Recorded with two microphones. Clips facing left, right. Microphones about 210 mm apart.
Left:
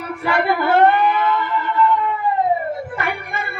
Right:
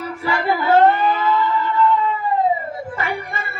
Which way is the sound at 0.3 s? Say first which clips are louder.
Left 1 dB; 60° left (ahead or behind).